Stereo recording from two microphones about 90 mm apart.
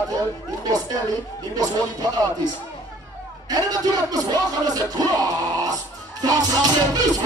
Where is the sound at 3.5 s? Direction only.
45° right (ahead or behind).